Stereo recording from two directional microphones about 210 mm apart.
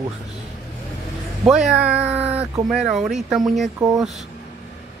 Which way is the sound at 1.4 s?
5° right (ahead or behind).